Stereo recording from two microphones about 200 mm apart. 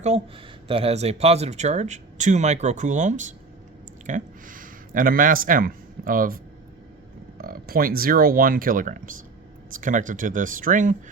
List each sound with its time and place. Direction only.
0.7 s speech: 30° right (ahead or behind)